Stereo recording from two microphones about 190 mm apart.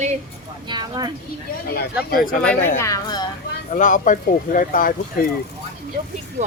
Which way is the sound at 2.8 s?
20° left (ahead or behind).